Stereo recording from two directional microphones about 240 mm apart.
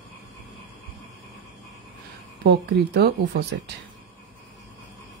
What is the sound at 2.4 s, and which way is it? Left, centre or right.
Speech, right.